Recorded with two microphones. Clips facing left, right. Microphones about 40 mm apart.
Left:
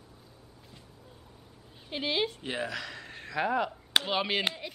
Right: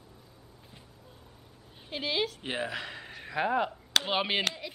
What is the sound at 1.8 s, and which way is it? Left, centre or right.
Speech, centre.